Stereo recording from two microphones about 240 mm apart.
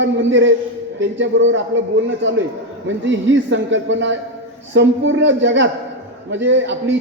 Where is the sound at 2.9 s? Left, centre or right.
Right.